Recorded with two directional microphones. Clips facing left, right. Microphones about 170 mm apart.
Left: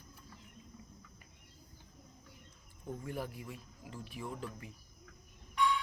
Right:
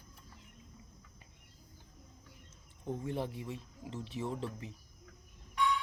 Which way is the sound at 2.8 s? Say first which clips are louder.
Right 4 dB; 25° right (ahead or behind).